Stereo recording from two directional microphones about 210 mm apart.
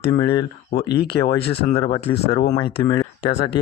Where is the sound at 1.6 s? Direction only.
25° left (ahead or behind).